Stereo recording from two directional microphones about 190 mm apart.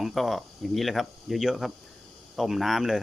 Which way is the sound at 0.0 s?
Centre (ahead or behind).